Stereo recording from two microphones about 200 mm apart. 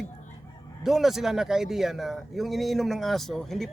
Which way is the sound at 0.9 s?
Centre (ahead or behind).